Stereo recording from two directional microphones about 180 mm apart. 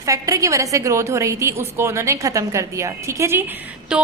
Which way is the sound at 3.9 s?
5° right (ahead or behind).